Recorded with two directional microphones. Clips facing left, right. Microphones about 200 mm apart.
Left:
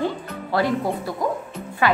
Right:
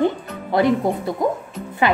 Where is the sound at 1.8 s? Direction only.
20° right (ahead or behind).